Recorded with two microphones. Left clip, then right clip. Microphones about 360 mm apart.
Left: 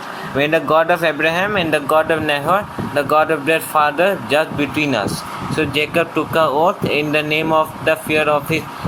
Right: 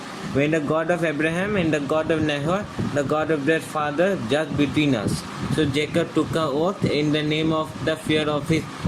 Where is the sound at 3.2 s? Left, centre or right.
Left.